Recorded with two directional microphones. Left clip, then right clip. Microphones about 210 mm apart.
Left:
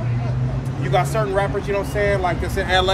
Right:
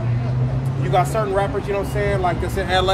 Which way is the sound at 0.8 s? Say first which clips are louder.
Right 1 dB; 20° right (ahead or behind).